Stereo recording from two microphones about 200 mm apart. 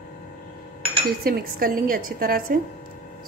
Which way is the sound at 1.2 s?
45° right (ahead or behind).